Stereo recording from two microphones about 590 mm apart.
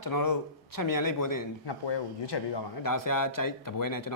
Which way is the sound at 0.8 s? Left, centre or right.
Left.